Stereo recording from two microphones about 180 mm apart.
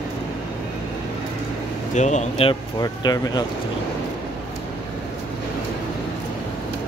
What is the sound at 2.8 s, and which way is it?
Speech, 20° left (ahead or behind).